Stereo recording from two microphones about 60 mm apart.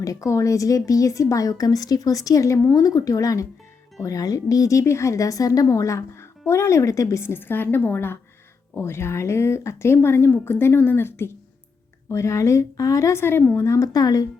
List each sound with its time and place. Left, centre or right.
0.0 s a woman's voice: left
6.4 s speech: left
7.3 s a woman's voice: left
12.1 s a woman's voice: left
13.2 s a woman's voice: left
13.6 s speech: left
13.9 s a woman's voice: left